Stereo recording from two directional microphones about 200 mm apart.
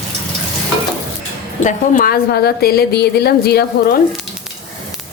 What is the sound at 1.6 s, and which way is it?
A woman's voice, 45° left (ahead or behind).